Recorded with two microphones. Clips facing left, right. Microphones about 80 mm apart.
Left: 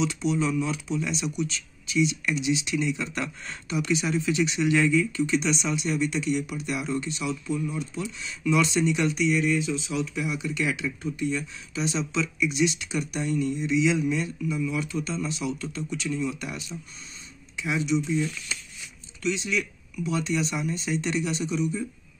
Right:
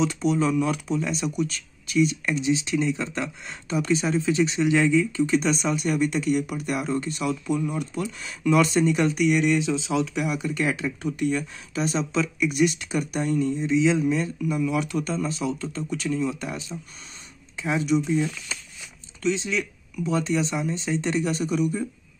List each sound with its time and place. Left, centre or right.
0.0 s speech: right
9.2 s speech: right
10.2 s speech: right
11.0 s speech: right
14.7 s speech: right
15.0 s speech: right
17.8 s speech: right